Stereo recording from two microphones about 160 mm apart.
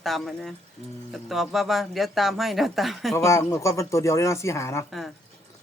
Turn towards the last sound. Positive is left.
turn(degrees=20)  # may be behind; listen again after turning